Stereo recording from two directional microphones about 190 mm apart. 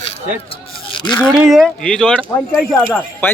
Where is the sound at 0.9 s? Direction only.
25° left (ahead or behind).